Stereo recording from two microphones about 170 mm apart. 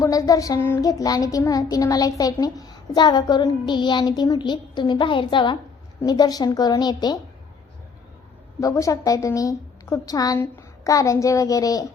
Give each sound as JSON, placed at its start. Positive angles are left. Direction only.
{"t": 0.0, "sound": "child singing", "side_deg": 20}
{"t": 8.6, "sound": "child singing", "side_deg": 20}